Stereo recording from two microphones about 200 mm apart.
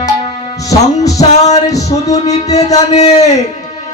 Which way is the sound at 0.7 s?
15° left (ahead or behind).